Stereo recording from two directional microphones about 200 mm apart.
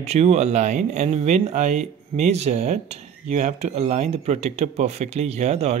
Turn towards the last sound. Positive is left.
turn(degrees=-35)  # may be behind; listen again after turning